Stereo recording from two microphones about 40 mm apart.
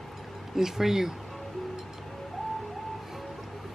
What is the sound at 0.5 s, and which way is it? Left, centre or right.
Speech, centre.